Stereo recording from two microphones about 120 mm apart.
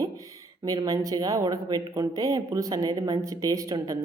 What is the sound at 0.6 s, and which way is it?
Speech, 30° right (ahead or behind).